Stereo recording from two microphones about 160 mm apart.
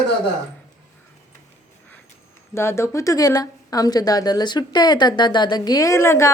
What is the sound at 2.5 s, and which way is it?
Speech, 15° left (ahead or behind).